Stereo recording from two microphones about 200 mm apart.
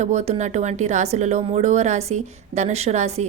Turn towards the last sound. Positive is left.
turn(degrees=-35)  # may be behind; listen again after turning